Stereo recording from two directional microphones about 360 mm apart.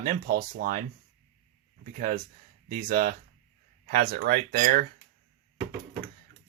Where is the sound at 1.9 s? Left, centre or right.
Right.